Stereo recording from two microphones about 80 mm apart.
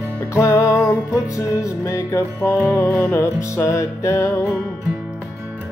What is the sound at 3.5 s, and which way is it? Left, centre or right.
Music, left.